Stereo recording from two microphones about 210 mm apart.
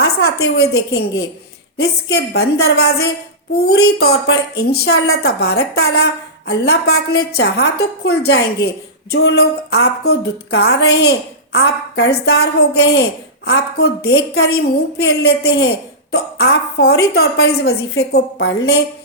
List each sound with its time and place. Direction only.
0.0 s a woman's voice: 50° left (ahead or behind)